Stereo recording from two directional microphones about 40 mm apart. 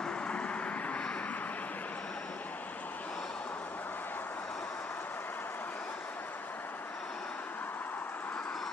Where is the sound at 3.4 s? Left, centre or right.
Left.